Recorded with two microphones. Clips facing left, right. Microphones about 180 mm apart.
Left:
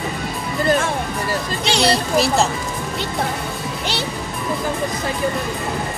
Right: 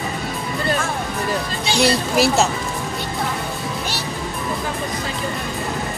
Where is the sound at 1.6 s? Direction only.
70° left (ahead or behind).